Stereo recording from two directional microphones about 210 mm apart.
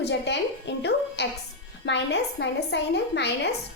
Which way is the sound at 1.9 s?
55° left (ahead or behind).